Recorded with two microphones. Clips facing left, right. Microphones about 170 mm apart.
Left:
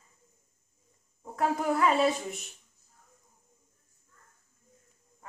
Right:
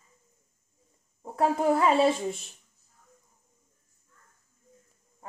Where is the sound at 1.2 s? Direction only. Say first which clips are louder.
Right 4 dB; 30° right (ahead or behind).